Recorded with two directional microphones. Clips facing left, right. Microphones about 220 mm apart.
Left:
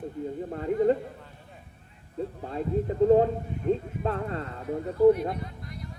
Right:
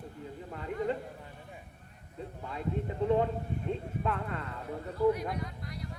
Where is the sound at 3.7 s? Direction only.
35° left (ahead or behind).